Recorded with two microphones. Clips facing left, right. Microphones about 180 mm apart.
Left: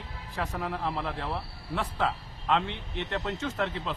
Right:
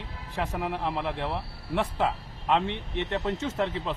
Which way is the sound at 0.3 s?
20° right (ahead or behind).